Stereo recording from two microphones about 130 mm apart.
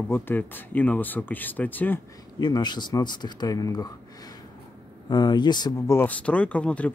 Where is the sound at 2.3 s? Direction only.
35° left (ahead or behind).